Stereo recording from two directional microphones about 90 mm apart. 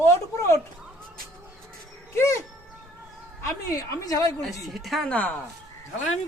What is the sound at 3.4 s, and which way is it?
A woman's voice, 35° left (ahead or behind).